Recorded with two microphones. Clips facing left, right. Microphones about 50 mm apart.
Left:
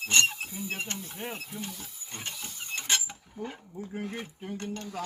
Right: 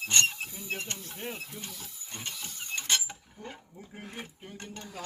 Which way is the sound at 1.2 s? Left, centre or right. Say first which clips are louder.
Left 2 dB; centre.